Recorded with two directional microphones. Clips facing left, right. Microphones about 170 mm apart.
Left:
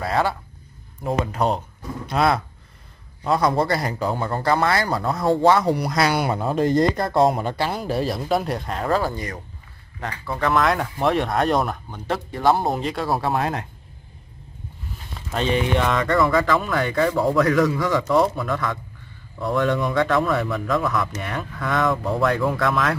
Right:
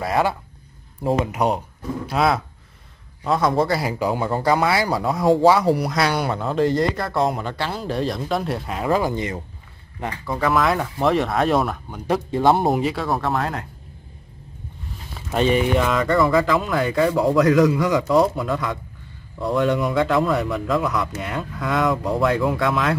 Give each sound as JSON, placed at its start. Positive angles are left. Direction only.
{"t": 0.0, "sound": "speech", "side_deg": -15}
{"t": 2.0, "sound": "speech", "side_deg": 0}
{"t": 6.7, "sound": "speech", "side_deg": 20}
{"t": 10.5, "sound": "speech", "side_deg": 0}
{"t": 12.1, "sound": "speech", "side_deg": -20}
{"t": 12.6, "sound": "speech", "side_deg": -5}
{"t": 13.2, "sound": "speech", "side_deg": 15}
{"t": 15.1, "sound": "speech", "side_deg": -5}
{"t": 18.3, "sound": "speech", "side_deg": -20}
{"t": 19.8, "sound": "speech", "side_deg": -5}
{"t": 20.9, "sound": "speech", "side_deg": -15}
{"t": 21.7, "sound": "speech", "side_deg": 0}